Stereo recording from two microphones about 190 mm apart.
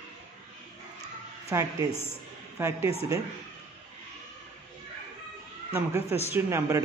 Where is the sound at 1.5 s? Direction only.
15° right (ahead or behind).